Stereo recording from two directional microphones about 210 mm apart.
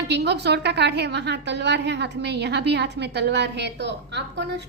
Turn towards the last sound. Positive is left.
turn(degrees=-55)  # may be behind; listen again after turning